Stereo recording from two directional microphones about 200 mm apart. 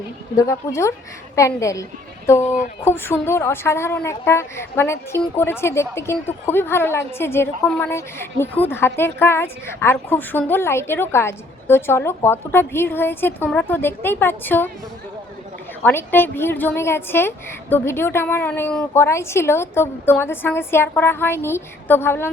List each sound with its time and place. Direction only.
0.3 s a woman's voice: 15° left (ahead or behind)
15.8 s a woman's voice: 10° left (ahead or behind)